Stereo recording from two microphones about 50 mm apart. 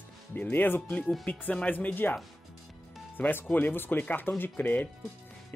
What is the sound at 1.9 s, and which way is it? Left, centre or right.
Speech, left.